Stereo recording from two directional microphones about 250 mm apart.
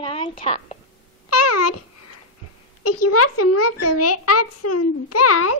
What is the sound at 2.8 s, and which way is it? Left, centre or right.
Speech, left.